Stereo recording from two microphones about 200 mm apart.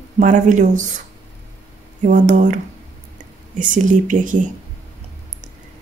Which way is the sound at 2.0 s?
40° right (ahead or behind).